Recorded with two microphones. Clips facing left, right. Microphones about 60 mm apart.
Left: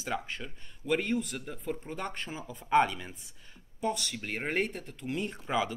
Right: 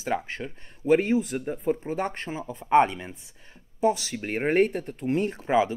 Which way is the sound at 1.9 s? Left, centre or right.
Right.